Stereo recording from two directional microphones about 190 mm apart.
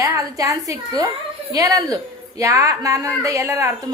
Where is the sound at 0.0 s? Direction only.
15° right (ahead or behind).